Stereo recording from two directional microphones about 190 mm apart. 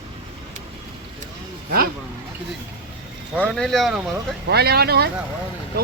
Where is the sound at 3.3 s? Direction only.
5° left (ahead or behind).